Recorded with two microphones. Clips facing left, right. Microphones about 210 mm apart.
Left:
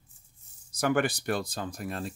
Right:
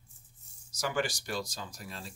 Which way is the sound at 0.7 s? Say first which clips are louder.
Left 6 dB; 55° left (ahead or behind).